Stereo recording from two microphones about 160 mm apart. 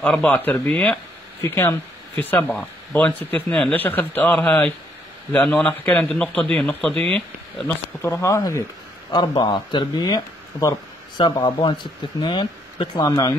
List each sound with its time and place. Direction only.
0.0 s speech: 5° left (ahead or behind); by 13.3 s 25° left (ahead or behind)